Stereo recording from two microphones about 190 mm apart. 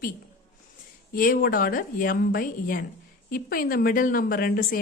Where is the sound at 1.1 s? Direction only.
50° left (ahead or behind).